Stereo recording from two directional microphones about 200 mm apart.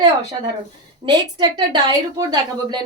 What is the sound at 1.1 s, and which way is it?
A woman's voice, 20° right (ahead or behind).